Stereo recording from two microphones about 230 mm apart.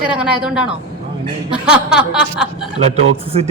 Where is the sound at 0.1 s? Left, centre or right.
Centre.